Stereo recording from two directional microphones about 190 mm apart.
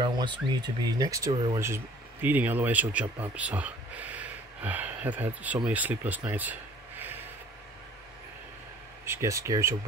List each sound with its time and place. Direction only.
0.0 s speech: 25° right (ahead or behind); by 7.2 s 10° right (ahead or behind)
9.0 s speech: 15° right (ahead or behind)